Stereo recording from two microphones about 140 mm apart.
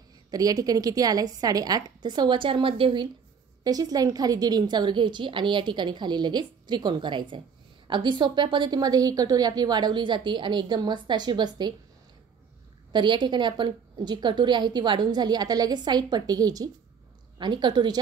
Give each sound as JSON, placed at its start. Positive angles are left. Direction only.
{"t": 0.3, "sound": "a woman's voice", "side_deg": -25}
{"t": 3.6, "sound": "a woman's voice", "side_deg": -25}
{"t": 12.9, "sound": "a woman's voice", "side_deg": -35}